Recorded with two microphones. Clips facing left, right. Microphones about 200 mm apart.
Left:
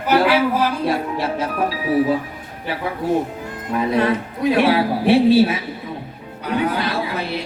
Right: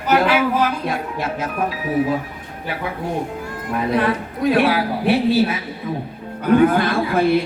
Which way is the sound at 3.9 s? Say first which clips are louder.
Even; 25° left (ahead or behind).